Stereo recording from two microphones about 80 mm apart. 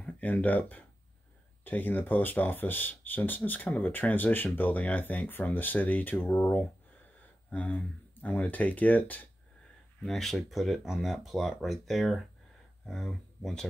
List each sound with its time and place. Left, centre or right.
0.0 s speech: centre
10.0 s speech: centre